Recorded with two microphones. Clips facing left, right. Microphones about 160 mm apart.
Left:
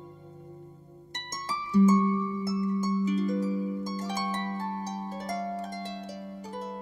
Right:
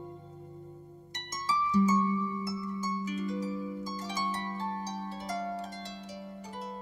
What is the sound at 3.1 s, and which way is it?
Harp, 35° left (ahead or behind).